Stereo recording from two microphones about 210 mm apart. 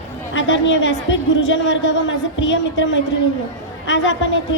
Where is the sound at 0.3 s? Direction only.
60° left (ahead or behind).